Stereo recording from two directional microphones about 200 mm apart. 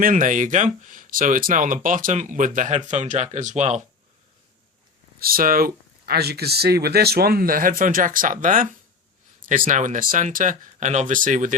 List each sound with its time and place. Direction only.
0.0 s speech: 40° right (ahead or behind)
5.2 s speech: 45° right (ahead or behind)
9.6 s speech: 40° right (ahead or behind)